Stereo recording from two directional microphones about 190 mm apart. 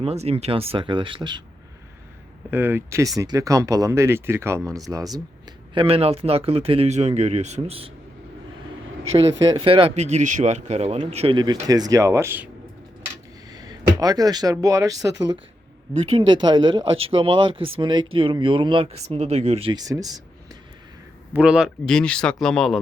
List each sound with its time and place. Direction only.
0.0 s speech: 35° right (ahead or behind)
2.5 s speech: 10° right (ahead or behind); by 7.9 s 30° right (ahead or behind)
9.5 s speech: 25° right (ahead or behind)
13.5 s speech: 20° right (ahead or behind)
16.0 s speech: 35° right (ahead or behind)
16.3 s speech: 25° right (ahead or behind)
21.3 s speech: 5° right (ahead or behind)